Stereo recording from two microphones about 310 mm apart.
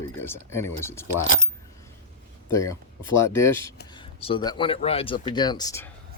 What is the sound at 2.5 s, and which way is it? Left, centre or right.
Speech, centre.